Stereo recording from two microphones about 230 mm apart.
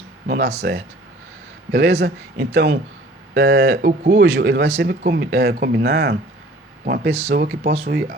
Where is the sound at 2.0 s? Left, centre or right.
Right.